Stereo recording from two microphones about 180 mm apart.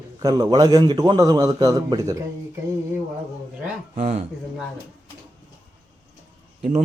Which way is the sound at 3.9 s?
40° right (ahead or behind).